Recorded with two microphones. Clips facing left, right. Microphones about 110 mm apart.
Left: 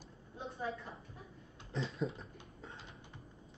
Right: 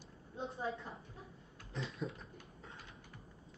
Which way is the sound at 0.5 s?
30° right (ahead or behind).